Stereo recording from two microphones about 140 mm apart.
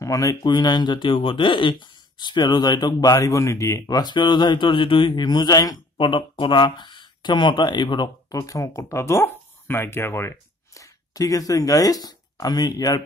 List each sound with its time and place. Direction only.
0.0 s speech: 25° left (ahead or behind)
8.4 s speech: 20° left (ahead or behind)